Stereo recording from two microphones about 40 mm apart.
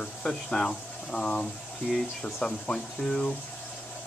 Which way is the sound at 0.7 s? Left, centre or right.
Left.